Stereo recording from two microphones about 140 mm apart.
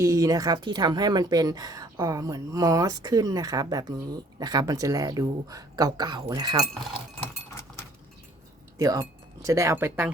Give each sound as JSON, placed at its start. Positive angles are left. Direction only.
{"t": 0.0, "sound": "a woman's voice", "side_deg": -20}
{"t": 8.8, "sound": "a woman's voice", "side_deg": -25}